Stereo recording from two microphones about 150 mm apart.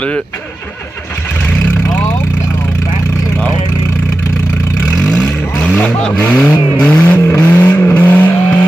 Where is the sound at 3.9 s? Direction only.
15° left (ahead or behind).